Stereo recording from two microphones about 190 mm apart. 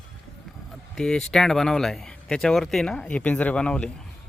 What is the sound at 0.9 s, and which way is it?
Speech, 5° left (ahead or behind).